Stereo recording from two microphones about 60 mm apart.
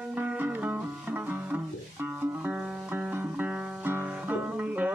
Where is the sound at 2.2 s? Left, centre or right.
Right.